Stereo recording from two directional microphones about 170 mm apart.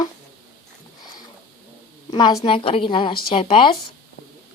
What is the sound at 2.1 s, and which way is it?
A woman's voice, 25° left (ahead or behind).